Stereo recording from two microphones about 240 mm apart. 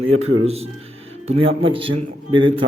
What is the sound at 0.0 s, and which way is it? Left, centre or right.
Speech, right.